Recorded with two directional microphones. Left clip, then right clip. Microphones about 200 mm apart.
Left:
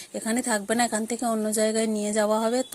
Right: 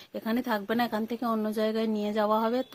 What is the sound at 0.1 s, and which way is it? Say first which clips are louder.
A woman's voice: left 3 dB; 15° left (ahead or behind).